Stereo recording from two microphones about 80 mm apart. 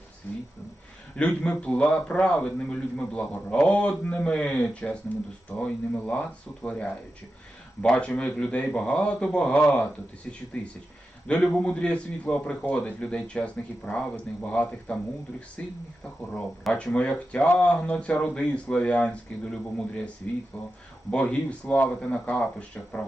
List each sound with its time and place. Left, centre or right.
0.3 s a sound: left
1.1 s a man's voice: centre
16.7 s a man's voice: centre